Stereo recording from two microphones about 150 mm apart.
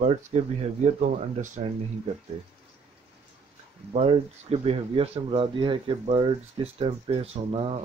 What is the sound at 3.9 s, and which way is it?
Speech, 45° right (ahead or behind).